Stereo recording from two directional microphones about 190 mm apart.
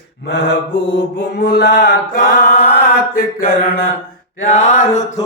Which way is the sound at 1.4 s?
65° left (ahead or behind).